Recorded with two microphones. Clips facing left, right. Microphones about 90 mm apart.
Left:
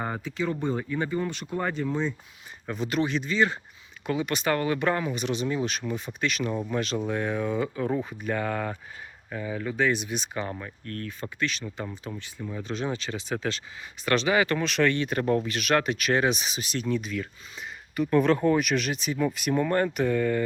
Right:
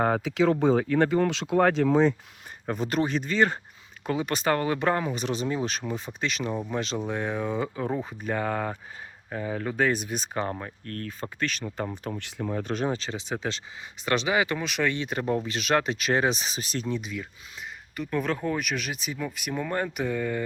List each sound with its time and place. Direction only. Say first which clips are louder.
0.0 s speech: right 7 dB; 85° right
2.6 s speech: right 1 dB; 45° right (ahead or behind)
4.0 s speech: right 1 dB; 35° right (ahead or behind)
12.0 s speech: right 4 dB; 65° right (ahead or behind)
12.5 s speech: right 3 dB; 50° right (ahead or behind)
12.9 s speech: even; 30° right (ahead or behind)
16.8 s speech: left 6 dB; 20° right (ahead or behind)
17.9 s speech: left 7 dB; centre (ahead or behind)